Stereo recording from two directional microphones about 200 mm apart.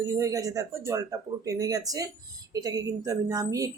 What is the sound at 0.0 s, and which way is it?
A woman's voice, 15° right (ahead or behind).